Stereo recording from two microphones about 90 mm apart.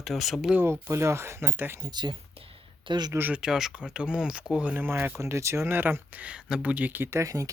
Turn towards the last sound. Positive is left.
turn(degrees=-35)  # may be behind; listen again after turning